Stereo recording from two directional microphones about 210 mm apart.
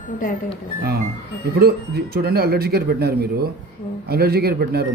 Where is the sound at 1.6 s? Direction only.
45° right (ahead or behind).